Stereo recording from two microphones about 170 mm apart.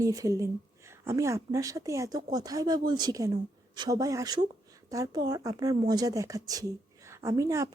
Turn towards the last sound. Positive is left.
turn(degrees=-20)  # may be behind; listen again after turning